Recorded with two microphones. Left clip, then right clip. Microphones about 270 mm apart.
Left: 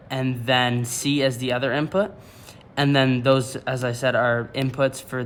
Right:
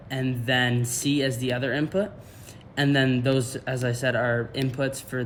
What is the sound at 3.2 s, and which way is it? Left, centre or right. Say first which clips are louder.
Speech: left 6 dB; centre.